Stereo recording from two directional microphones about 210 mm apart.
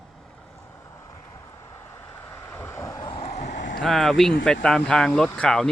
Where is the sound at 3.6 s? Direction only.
60° left (ahead or behind).